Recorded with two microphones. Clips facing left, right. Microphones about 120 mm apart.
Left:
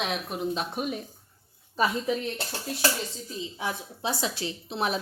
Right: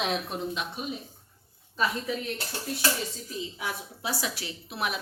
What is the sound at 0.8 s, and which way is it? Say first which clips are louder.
Speech: left 5 dB; 50° left (ahead or behind).